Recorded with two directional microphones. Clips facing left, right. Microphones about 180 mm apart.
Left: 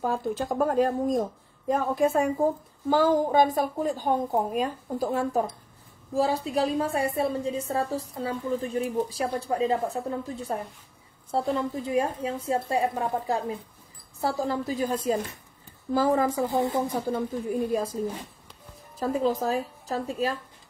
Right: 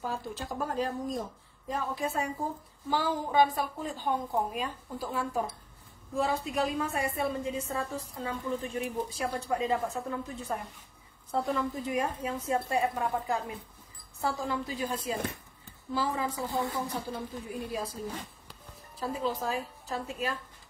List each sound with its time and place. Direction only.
0.0 s a woman's voice: 50° left (ahead or behind)
16.5 s a woman's voice: 20° left (ahead or behind)
16.9 s a woman's voice: 50° left (ahead or behind)
18.9 s a woman's voice: 45° left (ahead or behind)